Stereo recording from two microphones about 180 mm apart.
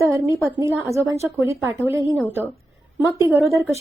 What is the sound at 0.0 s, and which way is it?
A woman's voice, 15° right (ahead or behind).